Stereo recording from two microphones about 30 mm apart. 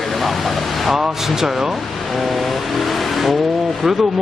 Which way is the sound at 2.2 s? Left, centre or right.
Centre.